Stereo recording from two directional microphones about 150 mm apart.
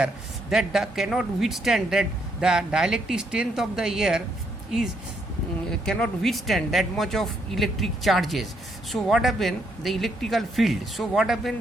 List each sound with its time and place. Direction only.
0.5 s speech: centre (ahead or behind)
5.8 s speech: 5° left (ahead or behind)